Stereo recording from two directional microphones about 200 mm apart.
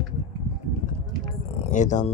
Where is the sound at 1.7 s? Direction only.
40° left (ahead or behind).